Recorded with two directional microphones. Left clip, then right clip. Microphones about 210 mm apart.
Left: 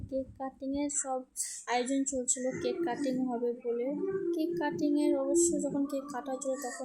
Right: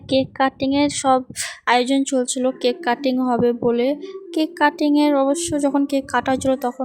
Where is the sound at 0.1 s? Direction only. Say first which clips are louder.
Right 19 dB; 45° right (ahead or behind).